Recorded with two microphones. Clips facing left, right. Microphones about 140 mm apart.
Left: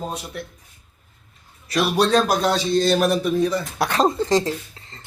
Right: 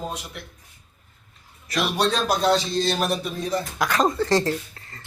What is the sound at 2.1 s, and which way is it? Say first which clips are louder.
A man's voice: left 2 dB; 50° left (ahead or behind).